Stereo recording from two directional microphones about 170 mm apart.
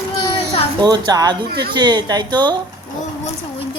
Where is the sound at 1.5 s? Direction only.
65° right (ahead or behind).